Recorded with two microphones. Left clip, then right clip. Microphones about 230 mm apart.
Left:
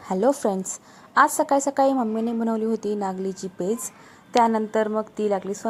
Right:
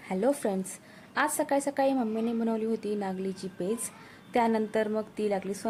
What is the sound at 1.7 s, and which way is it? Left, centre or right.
A woman's voice, centre.